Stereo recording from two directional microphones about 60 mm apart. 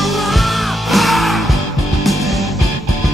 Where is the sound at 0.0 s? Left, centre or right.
Centre.